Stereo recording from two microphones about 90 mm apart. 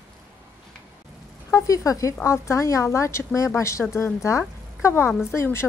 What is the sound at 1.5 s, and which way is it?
Speech, 40° left (ahead or behind).